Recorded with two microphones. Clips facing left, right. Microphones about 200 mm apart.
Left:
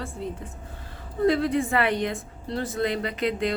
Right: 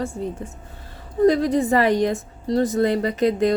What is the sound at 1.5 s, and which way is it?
A woman's voice, 40° right (ahead or behind).